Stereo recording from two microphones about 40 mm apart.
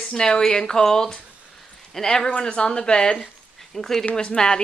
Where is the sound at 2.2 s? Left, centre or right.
Left.